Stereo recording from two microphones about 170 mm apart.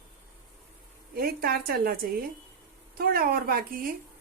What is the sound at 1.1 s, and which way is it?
Speech, 60° right (ahead or behind).